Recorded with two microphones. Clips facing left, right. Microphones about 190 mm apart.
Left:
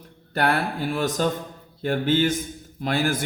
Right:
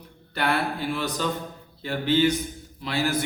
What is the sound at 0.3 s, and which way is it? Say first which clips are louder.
A man's voice: left 2 dB; 45° left (ahead or behind).